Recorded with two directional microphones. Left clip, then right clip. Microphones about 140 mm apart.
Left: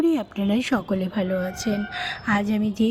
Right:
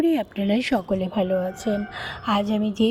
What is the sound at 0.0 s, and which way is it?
A woman's voice, 5° right (ahead or behind).